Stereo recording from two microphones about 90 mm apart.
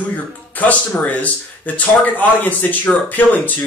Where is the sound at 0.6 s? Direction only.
15° left (ahead or behind).